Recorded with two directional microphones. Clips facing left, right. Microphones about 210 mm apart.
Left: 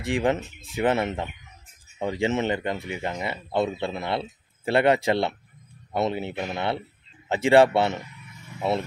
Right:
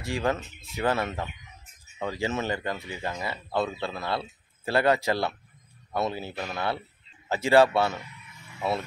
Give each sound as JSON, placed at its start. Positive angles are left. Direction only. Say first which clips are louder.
{"t": 0.1, "sound": "speech", "louder": "left 4 dB", "side_deg": 20}